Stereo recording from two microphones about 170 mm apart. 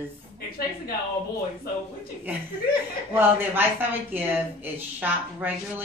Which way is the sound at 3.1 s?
10° right (ahead or behind).